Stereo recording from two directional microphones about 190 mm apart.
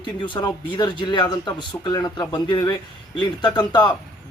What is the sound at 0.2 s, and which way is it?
Speech, 25° left (ahead or behind).